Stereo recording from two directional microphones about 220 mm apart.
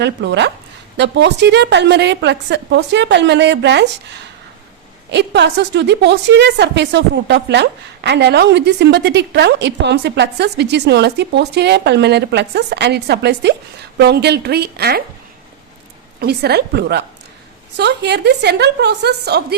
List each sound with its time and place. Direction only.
0.0 s a woman's voice: 50° right (ahead or behind)
5.1 s a woman's voice: 50° right (ahead or behind)
16.2 s a woman's voice: 45° right (ahead or behind)